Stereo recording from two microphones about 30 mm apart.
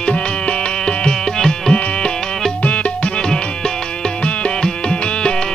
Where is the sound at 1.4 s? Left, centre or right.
Centre.